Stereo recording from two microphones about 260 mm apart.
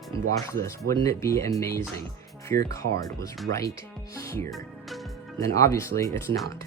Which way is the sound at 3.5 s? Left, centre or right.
Right.